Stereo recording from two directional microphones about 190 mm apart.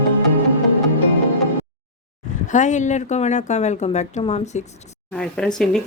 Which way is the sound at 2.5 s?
40° left (ahead or behind).